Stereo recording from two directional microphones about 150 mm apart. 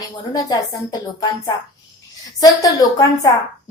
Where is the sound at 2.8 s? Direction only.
25° left (ahead or behind).